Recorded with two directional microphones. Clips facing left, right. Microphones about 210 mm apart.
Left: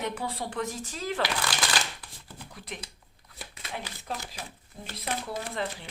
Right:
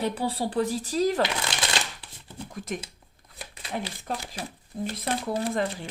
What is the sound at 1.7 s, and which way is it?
Shuffling cards, 25° right (ahead or behind).